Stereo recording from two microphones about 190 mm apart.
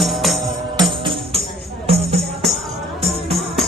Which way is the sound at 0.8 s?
25° right (ahead or behind).